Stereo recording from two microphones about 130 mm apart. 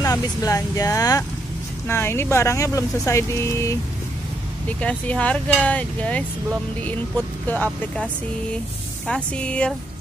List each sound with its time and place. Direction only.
0.0 s speech: 25° left (ahead or behind)
4.6 s speech: 10° left (ahead or behind)
7.4 s speech: 10° left (ahead or behind)